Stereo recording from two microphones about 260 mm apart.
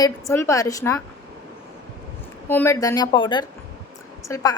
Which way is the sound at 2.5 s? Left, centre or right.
Centre.